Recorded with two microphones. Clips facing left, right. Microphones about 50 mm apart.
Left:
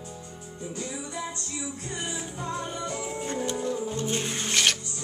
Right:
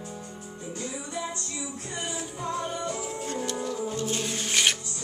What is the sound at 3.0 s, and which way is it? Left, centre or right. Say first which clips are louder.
Music: left 1 dB; left.